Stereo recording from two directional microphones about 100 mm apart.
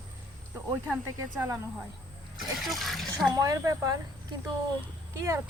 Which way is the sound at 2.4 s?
Centre (ahead or behind).